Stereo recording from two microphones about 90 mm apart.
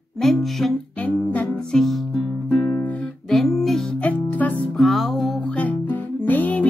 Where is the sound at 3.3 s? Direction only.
Centre (ahead or behind).